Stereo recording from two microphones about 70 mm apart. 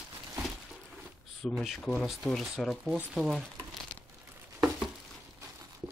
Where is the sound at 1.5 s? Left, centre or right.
Centre.